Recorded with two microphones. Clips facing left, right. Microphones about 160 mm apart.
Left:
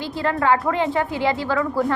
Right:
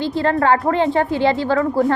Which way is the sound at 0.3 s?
40° right (ahead or behind).